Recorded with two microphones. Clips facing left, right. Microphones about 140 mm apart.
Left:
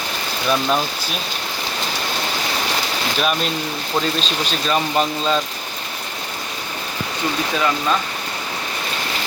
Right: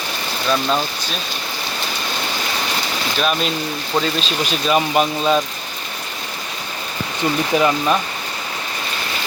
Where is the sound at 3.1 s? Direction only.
Centre (ahead or behind).